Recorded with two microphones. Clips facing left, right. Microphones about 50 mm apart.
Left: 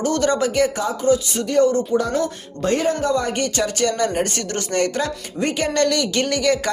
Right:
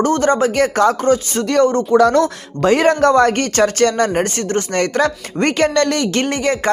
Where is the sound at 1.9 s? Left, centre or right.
Right.